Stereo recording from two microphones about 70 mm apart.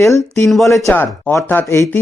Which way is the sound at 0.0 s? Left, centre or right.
Left.